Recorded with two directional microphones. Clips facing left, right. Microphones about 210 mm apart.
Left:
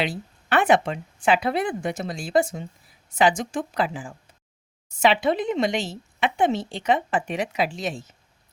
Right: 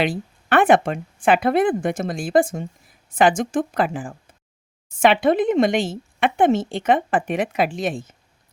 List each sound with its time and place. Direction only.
0.0 s speech: 55° right (ahead or behind)